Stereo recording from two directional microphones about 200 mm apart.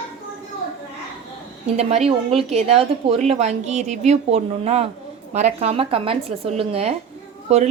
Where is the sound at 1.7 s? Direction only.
30° right (ahead or behind).